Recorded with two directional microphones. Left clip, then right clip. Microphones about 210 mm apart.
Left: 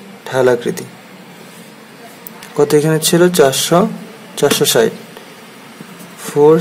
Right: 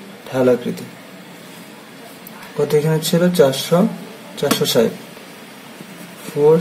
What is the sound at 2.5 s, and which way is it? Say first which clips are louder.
Speech: left 5 dB; 45° left (ahead or behind).